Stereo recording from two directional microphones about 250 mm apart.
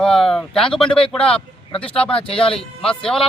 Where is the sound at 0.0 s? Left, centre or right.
Centre.